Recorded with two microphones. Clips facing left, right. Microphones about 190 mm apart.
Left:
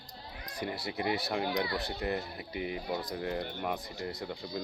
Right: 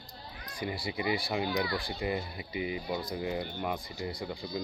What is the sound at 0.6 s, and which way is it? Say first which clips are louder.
Speech: right 1 dB; 5° right (ahead or behind).